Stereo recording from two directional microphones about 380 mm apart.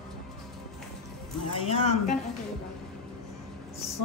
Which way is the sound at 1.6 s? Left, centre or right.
Centre.